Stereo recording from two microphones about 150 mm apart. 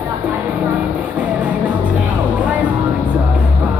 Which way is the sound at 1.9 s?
10° right (ahead or behind).